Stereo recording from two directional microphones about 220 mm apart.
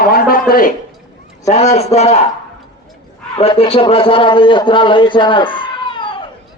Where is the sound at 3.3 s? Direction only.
25° left (ahead or behind).